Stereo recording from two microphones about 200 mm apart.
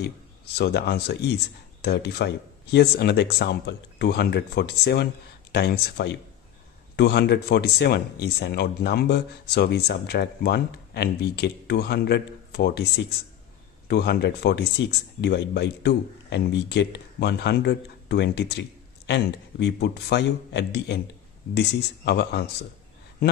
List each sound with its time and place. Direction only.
0.0 s a man's voice: 55° left (ahead or behind)